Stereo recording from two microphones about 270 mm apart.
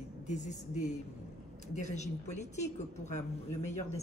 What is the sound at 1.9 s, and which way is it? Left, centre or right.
A woman's voice, left.